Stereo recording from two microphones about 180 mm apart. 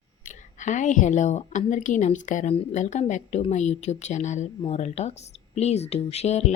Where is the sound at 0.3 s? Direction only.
45° left (ahead or behind).